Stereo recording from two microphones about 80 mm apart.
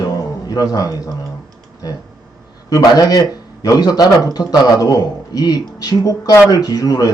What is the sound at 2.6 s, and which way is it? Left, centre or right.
A man's voice, left.